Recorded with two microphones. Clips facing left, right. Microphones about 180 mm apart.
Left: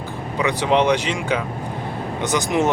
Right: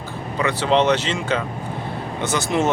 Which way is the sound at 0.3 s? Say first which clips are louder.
Even; 15° left (ahead or behind).